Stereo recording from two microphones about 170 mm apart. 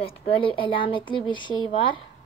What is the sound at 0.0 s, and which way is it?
Speech, 35° left (ahead or behind).